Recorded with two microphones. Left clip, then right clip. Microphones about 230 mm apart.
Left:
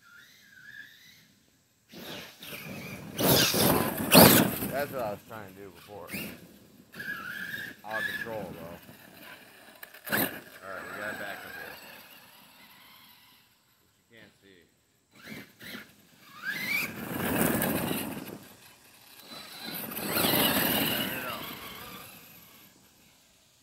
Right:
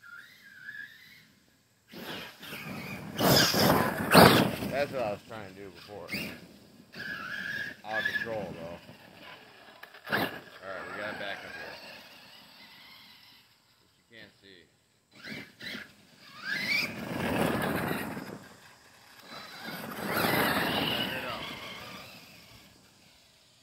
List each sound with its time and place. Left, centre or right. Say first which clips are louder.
1.9 s wild animals: right 2 dB; centre; by 4.1 s left
4.1 s dog: even; left
4.9 s speech: right 1 dB; centre
6.0 s speech: right 3 dB; left
6.9 s squeal: even; left
8.0 s speech: right 3 dB; left
8.4 s vehicle: right 2 dB; left
10.8 s speech: left 1 dB; left
11.3 s vehicle: even; left; by 12.8 s centre
14.1 s a sound: right 3 dB; centre
15.1 s squeal: right 3 dB; centre